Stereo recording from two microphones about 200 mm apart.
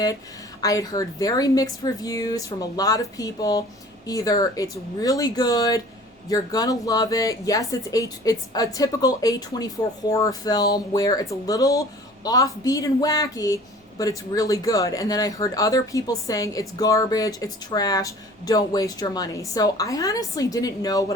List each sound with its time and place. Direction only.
0.6 s speech: 15° left (ahead or behind)